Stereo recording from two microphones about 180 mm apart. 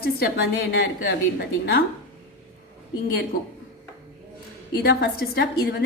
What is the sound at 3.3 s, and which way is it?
Speech, 50° left (ahead or behind).